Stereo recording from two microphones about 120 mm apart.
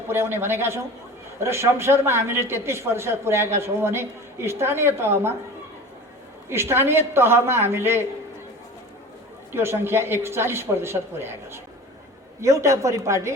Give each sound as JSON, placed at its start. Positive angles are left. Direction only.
{"t": 0.1, "sound": "a woman's voice", "side_deg": -20}
{"t": 6.5, "sound": "a woman's voice", "side_deg": -20}
{"t": 9.5, "sound": "a woman's voice", "side_deg": -20}